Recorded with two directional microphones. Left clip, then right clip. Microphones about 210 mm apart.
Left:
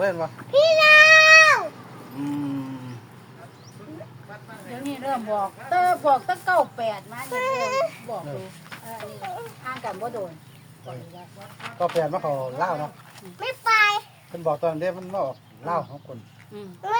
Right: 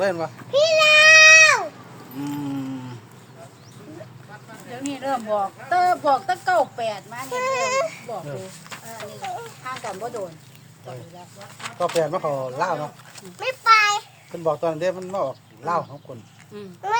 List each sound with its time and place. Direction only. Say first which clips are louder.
0.0 s speech: right 1 dB; 50° right (ahead or behind)
0.5 s goat: left 1 dB; 15° right (ahead or behind)
4.7 s speech: right 2 dB; 20° right (ahead or behind)
8.7 s a sound: even; 50° right (ahead or behind)
9.7 s speech: even; 20° right (ahead or behind)
11.3 s speech: right 1 dB; 50° right (ahead or behind)
13.4 s speech: right 3 dB; 25° right (ahead or behind)
14.4 s speech: right 2 dB; 50° right (ahead or behind)
16.6 s speech: right 1 dB; 20° right (ahead or behind)